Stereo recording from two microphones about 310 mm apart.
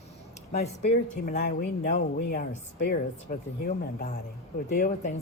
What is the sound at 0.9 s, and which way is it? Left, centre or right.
Speech, left.